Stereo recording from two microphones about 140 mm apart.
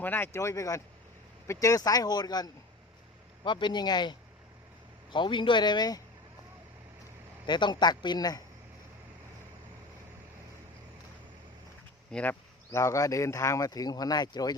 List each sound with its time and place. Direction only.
0.0 s speech: 15° left (ahead or behind); by 6.0 s 30° left (ahead or behind)
7.4 s speech: 35° left (ahead or behind)
12.1 s speech: 15° left (ahead or behind); by 14.5 s 30° left (ahead or behind)